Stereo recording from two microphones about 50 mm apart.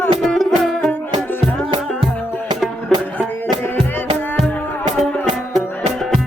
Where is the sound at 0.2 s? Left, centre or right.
Centre.